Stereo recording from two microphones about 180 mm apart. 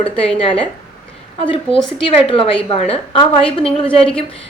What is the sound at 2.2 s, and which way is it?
A woman's voice, 30° left (ahead or behind).